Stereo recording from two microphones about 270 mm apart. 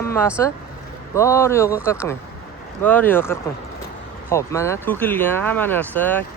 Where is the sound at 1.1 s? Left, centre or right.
Centre.